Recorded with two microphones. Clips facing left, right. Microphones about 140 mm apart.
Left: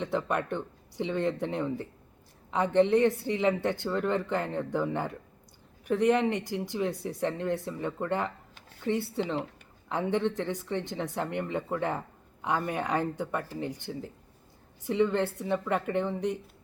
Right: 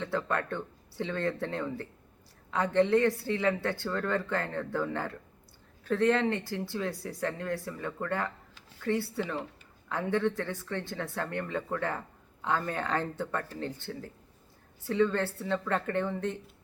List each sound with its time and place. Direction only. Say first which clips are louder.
0.0 s a woman's voice: left 2 dB; 20° left (ahead or behind)